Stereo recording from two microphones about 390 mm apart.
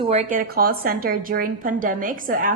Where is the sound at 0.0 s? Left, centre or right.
Centre.